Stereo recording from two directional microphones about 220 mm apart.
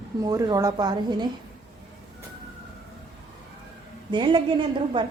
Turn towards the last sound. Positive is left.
turn(degrees=-20)  # may be behind; listen again after turning